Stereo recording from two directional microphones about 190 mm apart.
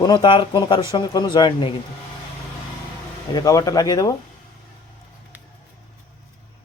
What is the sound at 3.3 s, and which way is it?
Speech, 20° left (ahead or behind).